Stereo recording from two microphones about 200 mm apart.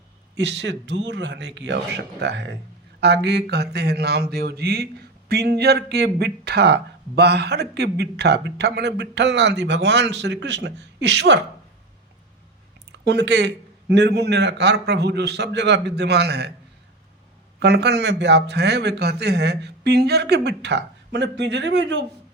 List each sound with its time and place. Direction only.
0.3 s speech: 60° right (ahead or behind)
13.1 s speech: 60° right (ahead or behind)
17.6 s speech: 55° right (ahead or behind)